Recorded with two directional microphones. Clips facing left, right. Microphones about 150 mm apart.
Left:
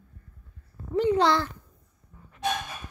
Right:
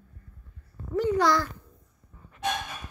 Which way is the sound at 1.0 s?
20° left (ahead or behind).